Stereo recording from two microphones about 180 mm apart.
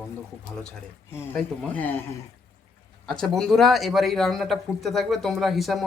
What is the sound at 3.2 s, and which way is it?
Speech, 5° left (ahead or behind).